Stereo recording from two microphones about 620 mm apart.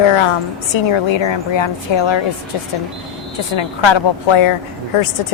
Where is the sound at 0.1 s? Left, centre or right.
Left.